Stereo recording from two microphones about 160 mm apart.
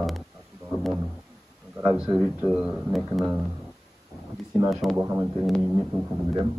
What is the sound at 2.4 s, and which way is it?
A man's voice, 5° right (ahead or behind).